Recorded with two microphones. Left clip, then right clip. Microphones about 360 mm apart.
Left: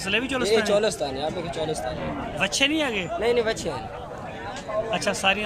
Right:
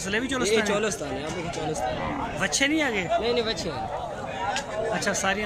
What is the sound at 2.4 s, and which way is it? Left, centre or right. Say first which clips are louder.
Speech: left 2 dB; centre.